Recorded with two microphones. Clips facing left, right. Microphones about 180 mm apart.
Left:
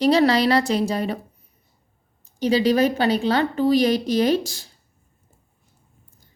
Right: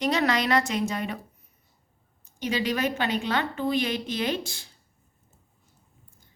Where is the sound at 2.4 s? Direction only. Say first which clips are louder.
Left 9 dB; 35° left (ahead or behind).